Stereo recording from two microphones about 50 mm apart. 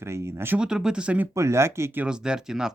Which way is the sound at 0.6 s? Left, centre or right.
Centre.